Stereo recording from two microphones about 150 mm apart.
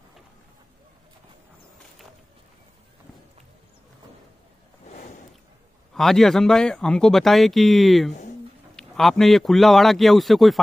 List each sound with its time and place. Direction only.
5.9 s speech: centre (ahead or behind)